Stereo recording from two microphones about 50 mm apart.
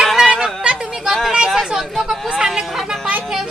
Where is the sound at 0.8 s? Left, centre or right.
Centre.